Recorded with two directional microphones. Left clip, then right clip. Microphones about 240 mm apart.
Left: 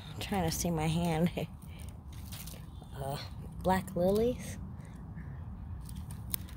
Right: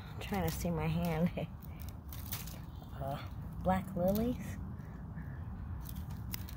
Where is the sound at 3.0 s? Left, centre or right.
Left.